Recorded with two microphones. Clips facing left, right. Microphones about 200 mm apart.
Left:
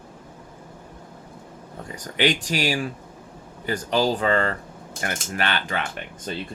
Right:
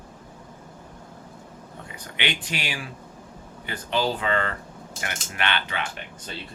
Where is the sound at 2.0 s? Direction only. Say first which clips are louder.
Left 8 dB; 40° left (ahead or behind).